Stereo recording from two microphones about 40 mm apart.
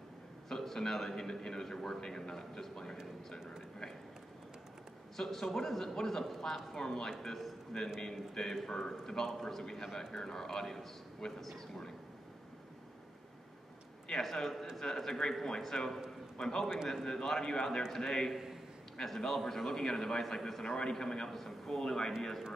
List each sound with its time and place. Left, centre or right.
0.5 s a man's voice: centre
5.1 s a man's voice: centre
8.0 s a man's voice: centre
14.2 s a man's voice: centre
20.6 s a man's voice: left